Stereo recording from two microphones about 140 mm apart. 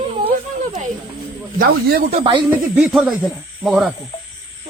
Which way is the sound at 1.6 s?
90° right.